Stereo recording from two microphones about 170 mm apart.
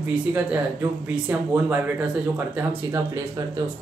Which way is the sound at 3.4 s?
25° right (ahead or behind).